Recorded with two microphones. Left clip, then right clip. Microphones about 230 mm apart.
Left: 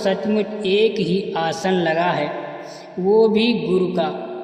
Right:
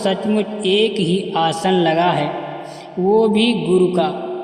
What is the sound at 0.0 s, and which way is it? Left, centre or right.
A man's voice, right.